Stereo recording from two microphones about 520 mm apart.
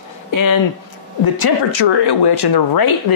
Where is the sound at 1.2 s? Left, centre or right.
Left.